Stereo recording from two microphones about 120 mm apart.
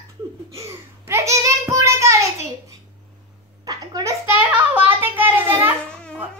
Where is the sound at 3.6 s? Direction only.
35° right (ahead or behind).